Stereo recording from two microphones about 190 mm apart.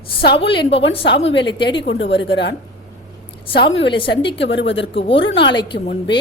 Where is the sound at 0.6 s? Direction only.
30° left (ahead or behind).